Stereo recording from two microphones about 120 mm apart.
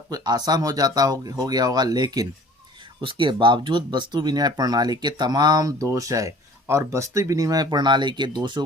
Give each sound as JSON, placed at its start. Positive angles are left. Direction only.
{"t": 0.1, "sound": "speech", "side_deg": -35}
{"t": 3.0, "sound": "speech", "side_deg": -45}